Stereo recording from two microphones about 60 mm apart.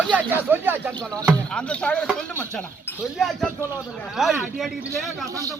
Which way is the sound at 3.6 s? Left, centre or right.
Left.